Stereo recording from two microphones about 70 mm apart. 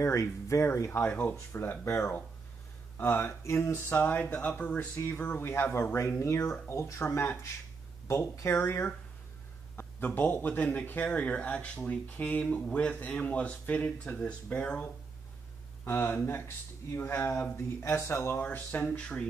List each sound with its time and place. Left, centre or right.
0.0 s speech: left
0.9 s a man's voice: left
3.0 s a man's voice: left
4.7 s a man's voice: left
15.8 s speech: left
18.4 s a man's voice: left